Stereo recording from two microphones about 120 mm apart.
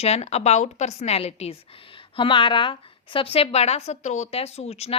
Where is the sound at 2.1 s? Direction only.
45° left (ahead or behind).